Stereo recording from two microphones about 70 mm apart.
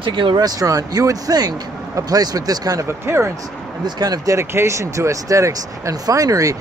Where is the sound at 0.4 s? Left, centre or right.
Right.